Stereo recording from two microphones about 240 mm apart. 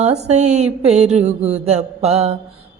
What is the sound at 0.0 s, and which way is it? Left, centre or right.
Mantra, right.